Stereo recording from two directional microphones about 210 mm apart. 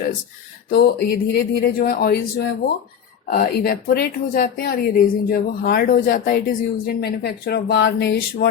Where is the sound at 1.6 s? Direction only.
45° left (ahead or behind).